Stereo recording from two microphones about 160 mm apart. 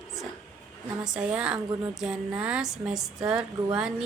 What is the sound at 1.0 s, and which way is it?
A woman's voice, 5° right (ahead or behind).